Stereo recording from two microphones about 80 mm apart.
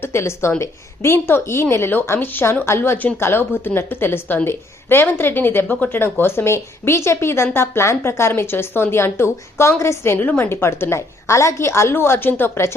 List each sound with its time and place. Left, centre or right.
0.0 s a woman's voice: left